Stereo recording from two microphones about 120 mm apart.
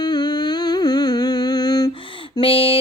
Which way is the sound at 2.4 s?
50° left (ahead or behind).